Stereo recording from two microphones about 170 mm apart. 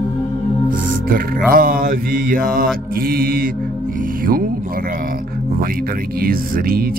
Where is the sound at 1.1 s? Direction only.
60° right (ahead or behind).